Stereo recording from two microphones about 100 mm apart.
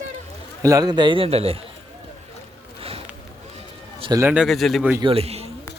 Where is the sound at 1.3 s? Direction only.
85° right.